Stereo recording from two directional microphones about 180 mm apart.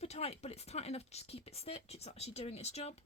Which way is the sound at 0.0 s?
35° left (ahead or behind).